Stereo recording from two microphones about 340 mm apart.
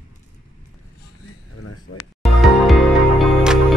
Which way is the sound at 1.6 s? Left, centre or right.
Left.